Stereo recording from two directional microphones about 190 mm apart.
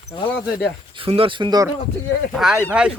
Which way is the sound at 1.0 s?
30° right (ahead or behind).